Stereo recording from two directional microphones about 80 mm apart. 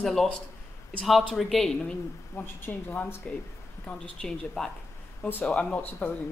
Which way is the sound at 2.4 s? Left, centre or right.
Left.